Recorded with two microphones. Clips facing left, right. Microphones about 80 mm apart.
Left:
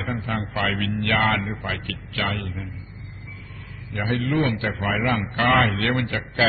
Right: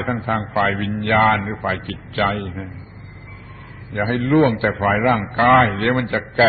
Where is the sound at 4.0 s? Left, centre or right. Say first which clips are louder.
Right 7 dB; right.